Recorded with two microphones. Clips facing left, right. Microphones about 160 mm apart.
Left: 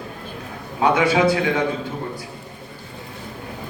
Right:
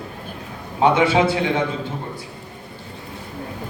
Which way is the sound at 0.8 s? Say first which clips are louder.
Right 1 dB; 25° right (ahead or behind).